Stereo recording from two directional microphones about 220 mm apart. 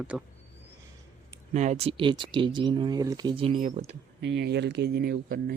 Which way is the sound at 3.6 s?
35° right (ahead or behind).